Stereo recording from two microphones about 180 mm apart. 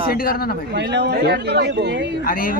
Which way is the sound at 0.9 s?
65° right (ahead or behind).